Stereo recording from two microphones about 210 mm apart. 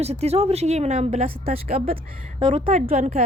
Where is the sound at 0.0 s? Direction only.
30° right (ahead or behind).